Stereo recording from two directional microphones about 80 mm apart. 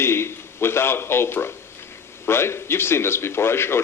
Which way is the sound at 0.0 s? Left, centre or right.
Left.